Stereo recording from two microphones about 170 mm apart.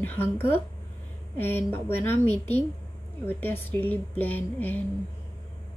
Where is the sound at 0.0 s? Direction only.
10° left (ahead or behind).